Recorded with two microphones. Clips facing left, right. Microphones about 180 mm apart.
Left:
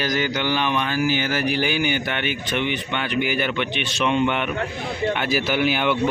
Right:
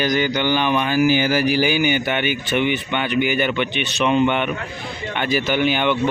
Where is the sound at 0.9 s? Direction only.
10° right (ahead or behind).